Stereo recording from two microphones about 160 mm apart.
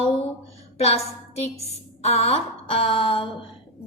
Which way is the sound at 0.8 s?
40° left (ahead or behind).